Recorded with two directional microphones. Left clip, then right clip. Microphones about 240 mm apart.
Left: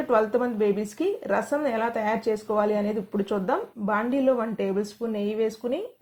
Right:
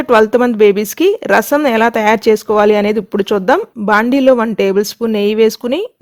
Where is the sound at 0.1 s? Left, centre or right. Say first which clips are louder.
Right 13 dB; right.